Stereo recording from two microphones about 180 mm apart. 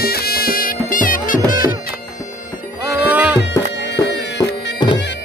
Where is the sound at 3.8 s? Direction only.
70° left (ahead or behind).